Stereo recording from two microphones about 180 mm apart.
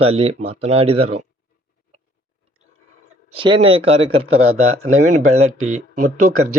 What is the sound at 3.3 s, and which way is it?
Speech, 30° right (ahead or behind).